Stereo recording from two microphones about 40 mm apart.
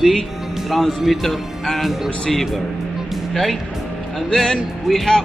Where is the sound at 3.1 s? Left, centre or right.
Centre.